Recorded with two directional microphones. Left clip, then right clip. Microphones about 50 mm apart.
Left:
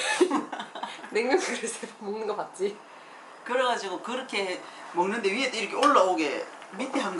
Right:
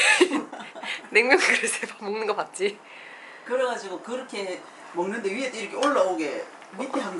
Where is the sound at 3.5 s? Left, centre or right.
Left.